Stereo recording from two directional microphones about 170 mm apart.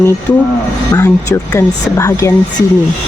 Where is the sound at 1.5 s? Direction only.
20° left (ahead or behind).